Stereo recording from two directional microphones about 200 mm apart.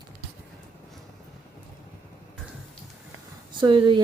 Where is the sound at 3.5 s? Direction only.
25° right (ahead or behind).